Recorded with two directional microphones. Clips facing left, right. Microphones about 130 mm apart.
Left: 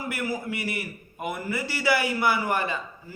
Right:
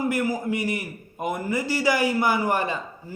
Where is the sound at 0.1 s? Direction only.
40° right (ahead or behind).